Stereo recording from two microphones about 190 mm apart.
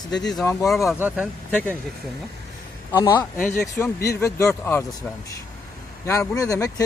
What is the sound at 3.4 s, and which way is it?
Speech, 45° left (ahead or behind).